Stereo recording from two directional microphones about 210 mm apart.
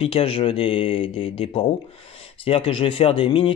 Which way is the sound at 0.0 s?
25° left (ahead or behind).